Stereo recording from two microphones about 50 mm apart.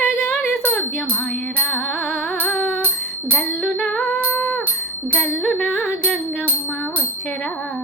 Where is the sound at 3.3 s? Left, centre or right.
Centre.